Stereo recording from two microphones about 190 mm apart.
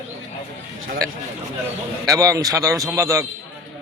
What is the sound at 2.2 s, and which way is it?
A man's voice, 20° right (ahead or behind).